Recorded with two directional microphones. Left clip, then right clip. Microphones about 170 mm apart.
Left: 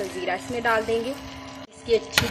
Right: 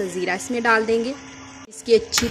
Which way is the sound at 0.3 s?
50° right (ahead or behind).